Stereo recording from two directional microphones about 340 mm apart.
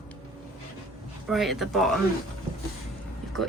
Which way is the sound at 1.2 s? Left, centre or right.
Centre.